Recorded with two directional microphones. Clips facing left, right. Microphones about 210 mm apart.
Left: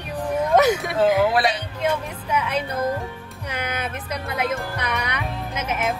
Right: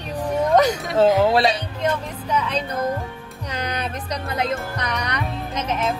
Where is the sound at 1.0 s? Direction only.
30° right (ahead or behind).